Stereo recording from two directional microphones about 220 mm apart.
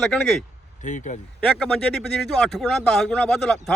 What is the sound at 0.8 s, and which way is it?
Speech, 35° left (ahead or behind).